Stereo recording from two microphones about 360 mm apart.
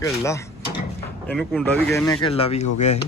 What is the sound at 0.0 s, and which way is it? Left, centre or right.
A man's voice, centre.